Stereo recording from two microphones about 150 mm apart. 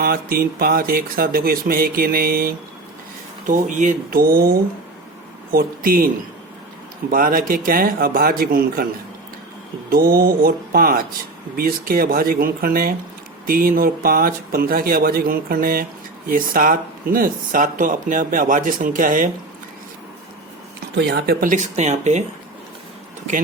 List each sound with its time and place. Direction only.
0.0 s speech: 85° right
3.4 s speech: 60° right (ahead or behind)
7.1 s speech: 70° right (ahead or behind)
9.9 s speech: 80° right
21.1 s speech: 90° right; by 22.2 s 50° right (ahead or behind)